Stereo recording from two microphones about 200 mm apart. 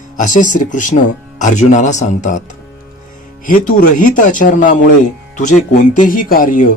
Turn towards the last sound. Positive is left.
turn(degrees=45)  # may be behind; listen again after turning